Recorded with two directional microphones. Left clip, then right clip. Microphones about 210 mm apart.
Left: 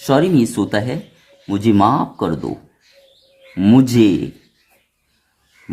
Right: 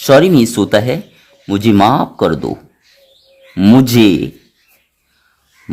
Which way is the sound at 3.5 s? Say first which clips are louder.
Right 4 dB; 30° right (ahead or behind).